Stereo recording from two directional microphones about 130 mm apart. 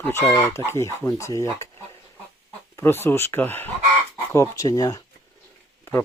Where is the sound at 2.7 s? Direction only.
15° left (ahead or behind).